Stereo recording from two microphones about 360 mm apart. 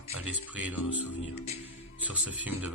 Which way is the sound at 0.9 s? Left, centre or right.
Left.